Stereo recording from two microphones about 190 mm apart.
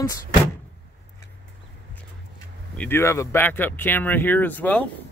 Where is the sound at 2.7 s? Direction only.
10° left (ahead or behind).